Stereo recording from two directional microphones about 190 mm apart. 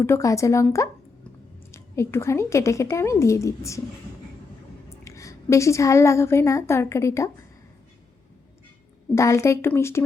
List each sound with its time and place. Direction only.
0.0 s a woman's voice: 15° left (ahead or behind)
4.9 s a woman's voice: 15° left (ahead or behind)
9.1 s a woman's voice: 15° left (ahead or behind)